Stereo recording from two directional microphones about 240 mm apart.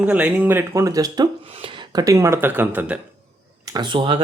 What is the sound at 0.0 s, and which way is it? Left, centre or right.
Speech, centre.